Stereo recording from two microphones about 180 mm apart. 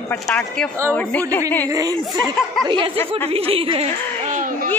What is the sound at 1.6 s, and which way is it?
Speech, 20° right (ahead or behind).